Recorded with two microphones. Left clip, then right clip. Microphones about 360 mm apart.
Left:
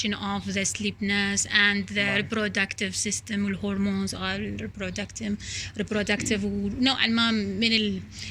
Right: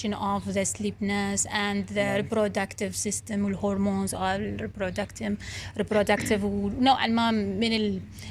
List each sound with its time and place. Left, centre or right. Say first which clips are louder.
0.0 s speech: right 1 dB; centre